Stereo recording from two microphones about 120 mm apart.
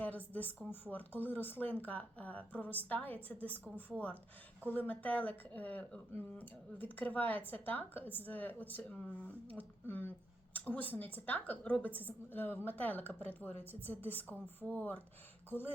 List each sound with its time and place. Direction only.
0.3 s a woman's voice: 15° left (ahead or behind)